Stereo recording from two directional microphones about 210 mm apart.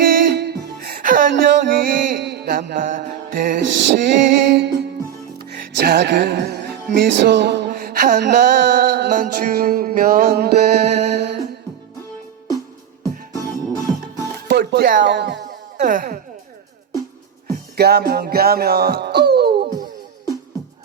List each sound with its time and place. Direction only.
0.0 s music: 50° right (ahead or behind)
3.7 s music: 55° right (ahead or behind); by 8.4 s 40° right (ahead or behind)
8.6 s music: 55° right (ahead or behind)
10.8 s music: 30° right (ahead or behind)
13.3 s music: 15° left (ahead or behind)
14.4 s music: 50° right (ahead or behind)
15.8 s speech: 40° right (ahead or behind)
17.7 s music: 50° right (ahead or behind)